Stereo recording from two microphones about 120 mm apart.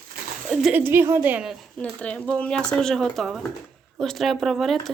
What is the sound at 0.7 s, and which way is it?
Speech, 20° right (ahead or behind).